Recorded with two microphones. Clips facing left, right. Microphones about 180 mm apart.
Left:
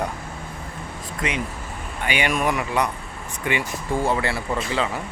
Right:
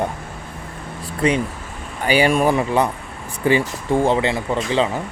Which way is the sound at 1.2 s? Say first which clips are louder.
Right 9 dB; 35° right (ahead or behind).